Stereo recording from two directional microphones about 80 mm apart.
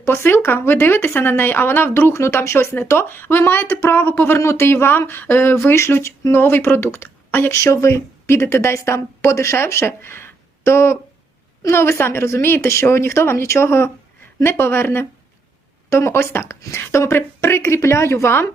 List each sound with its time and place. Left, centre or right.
0.0 s speech: left
7.6 s a woman's voice: left